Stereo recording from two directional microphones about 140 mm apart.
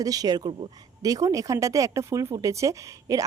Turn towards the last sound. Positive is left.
turn(degrees=-25)  # may be behind; listen again after turning